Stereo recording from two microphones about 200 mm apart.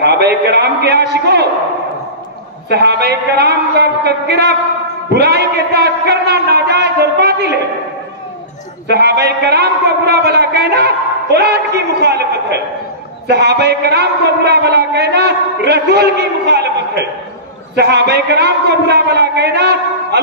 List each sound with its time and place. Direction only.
0.0 s a man's voice: 55° right (ahead or behind)
2.7 s a man's voice: 55° right (ahead or behind)
8.8 s a man's voice: 55° right (ahead or behind)